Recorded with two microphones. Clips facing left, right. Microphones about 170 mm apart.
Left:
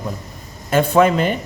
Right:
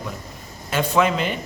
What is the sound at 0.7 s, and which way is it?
Speech, 50° left (ahead or behind).